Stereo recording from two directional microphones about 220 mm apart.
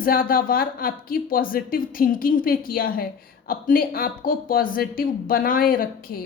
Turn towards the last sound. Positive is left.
turn(degrees=40)  # may be behind; listen again after turning